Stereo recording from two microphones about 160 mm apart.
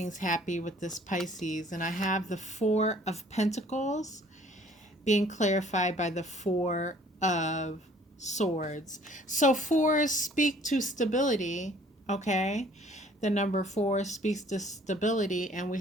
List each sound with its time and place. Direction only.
0.0 s a woman's voice: 50° left (ahead or behind)